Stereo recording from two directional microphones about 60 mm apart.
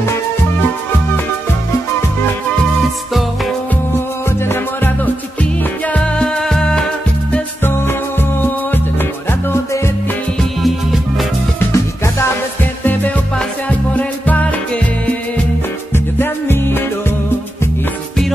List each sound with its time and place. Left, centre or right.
4.5 s music: left; by 6.9 s centre
8.2 s music: left
10.6 s music: centre
11.7 s music: left
13.7 s music: left
15.9 s music: left